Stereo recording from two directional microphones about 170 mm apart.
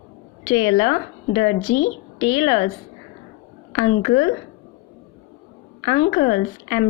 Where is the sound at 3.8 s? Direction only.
40° left (ahead or behind).